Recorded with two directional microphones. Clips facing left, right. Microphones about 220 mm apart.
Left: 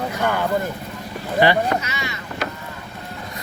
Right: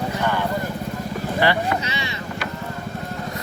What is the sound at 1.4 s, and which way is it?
Speech, 20° left (ahead or behind).